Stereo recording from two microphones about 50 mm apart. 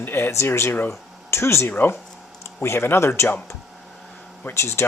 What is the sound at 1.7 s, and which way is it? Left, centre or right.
Speech, left.